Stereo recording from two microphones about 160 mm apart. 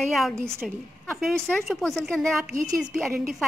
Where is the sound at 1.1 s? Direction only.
Centre (ahead or behind).